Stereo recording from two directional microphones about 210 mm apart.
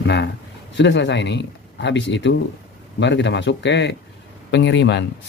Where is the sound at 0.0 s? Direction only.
55° left (ahead or behind).